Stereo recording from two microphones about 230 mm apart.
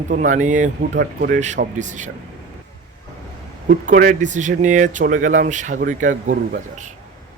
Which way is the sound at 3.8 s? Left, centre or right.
Right.